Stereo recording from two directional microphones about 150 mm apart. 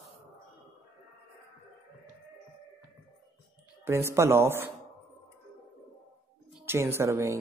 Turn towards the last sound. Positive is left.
turn(degrees=-20)  # may be behind; listen again after turning